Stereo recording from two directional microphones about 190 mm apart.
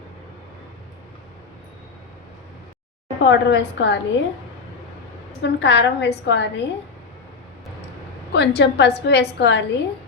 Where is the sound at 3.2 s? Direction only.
70° left (ahead or behind).